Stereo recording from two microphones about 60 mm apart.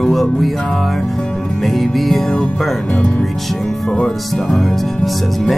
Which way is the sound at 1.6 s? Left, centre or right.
Centre.